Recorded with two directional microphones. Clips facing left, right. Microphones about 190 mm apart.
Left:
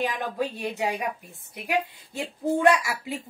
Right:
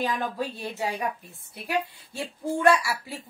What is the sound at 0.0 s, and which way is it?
A woman's voice, 15° left (ahead or behind).